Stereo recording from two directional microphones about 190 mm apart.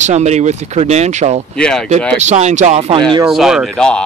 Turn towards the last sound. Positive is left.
turn(degrees=5)  # may be behind; listen again after turning